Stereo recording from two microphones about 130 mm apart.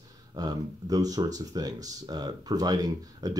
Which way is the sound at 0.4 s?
30° right (ahead or behind).